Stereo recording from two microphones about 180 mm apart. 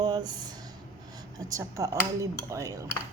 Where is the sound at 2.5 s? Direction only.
15° right (ahead or behind).